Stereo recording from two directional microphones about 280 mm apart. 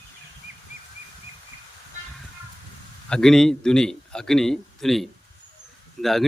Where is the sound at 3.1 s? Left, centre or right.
Centre.